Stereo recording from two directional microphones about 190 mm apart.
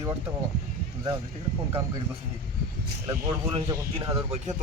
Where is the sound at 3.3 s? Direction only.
25° right (ahead or behind).